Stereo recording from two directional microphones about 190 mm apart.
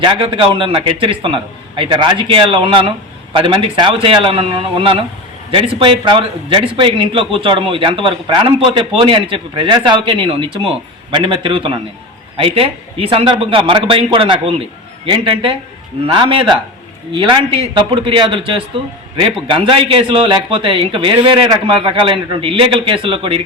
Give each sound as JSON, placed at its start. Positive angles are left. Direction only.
{"t": 0.0, "sound": "speech", "side_deg": -25}